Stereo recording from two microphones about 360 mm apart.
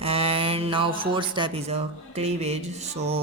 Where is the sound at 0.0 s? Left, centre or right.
Centre.